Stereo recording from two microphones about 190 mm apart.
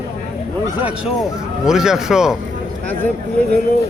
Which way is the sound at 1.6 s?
Centre (ahead or behind).